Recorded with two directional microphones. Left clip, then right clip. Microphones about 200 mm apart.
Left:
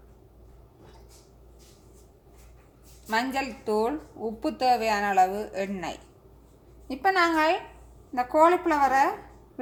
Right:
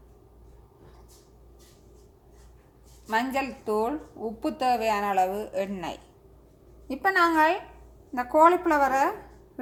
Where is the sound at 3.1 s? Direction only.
10° right (ahead or behind).